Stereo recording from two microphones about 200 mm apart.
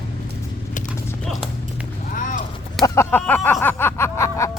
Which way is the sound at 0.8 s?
5° left (ahead or behind).